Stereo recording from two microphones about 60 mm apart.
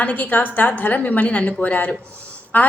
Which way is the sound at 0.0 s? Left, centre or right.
Left.